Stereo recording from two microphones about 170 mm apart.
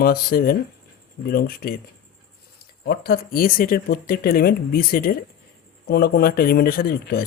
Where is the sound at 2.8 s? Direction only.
65° left (ahead or behind).